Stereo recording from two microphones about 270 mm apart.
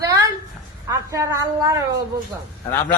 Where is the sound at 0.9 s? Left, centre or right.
Centre.